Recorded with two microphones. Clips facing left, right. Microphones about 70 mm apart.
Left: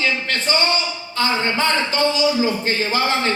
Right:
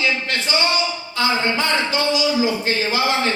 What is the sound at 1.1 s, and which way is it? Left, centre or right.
Speech, left.